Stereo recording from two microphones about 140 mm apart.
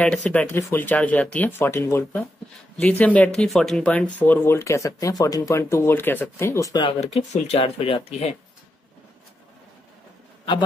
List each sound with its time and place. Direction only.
0.0 s speech: 10° left (ahead or behind); by 6.9 s 25° left (ahead or behind)
6.9 s speech: 50° left (ahead or behind)